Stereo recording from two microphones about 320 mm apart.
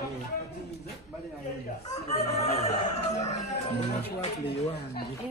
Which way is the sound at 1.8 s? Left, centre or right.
Centre.